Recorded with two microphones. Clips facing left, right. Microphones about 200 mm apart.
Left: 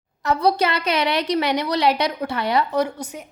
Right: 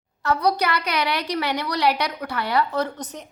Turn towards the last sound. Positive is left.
turn(degrees=10)  # may be behind; listen again after turning